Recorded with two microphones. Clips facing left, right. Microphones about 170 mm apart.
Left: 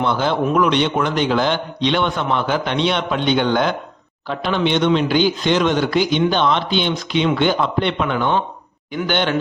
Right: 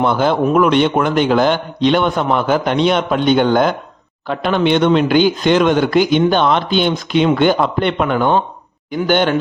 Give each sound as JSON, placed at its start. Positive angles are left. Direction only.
{"t": 0.0, "sound": "a man's voice", "side_deg": -50}